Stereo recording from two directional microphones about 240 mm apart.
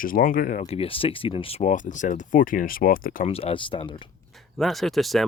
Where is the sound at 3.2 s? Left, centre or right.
Left.